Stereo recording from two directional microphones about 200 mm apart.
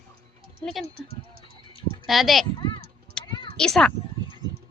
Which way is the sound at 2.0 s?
Centre (ahead or behind).